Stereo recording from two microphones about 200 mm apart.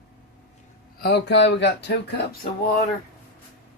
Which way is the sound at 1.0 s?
55° left (ahead or behind).